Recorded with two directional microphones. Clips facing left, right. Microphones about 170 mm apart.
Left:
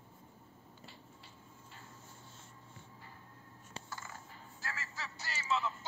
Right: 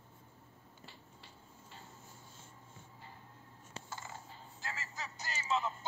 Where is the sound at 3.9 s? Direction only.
20° right (ahead or behind).